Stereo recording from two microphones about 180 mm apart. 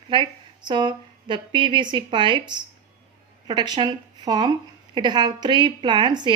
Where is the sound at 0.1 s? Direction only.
25° right (ahead or behind).